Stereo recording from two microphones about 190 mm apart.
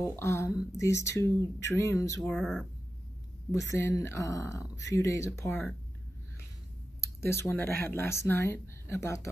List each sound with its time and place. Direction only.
0.0 s speech: 15° left (ahead or behind)
2.2 s speech: centre (ahead or behind)
3.5 s speech: 15° left (ahead or behind)
7.2 s speech: 15° left (ahead or behind)